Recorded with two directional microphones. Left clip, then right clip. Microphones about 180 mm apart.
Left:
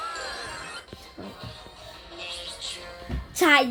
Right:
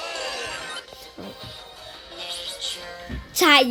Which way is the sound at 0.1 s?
60° right (ahead or behind).